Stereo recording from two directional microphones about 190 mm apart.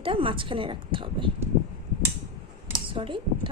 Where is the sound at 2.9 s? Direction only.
25° right (ahead or behind).